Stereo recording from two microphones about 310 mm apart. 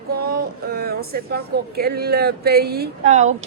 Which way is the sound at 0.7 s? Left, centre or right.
Right.